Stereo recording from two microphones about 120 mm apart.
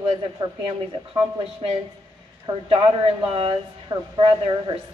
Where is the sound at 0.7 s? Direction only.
50° right (ahead or behind).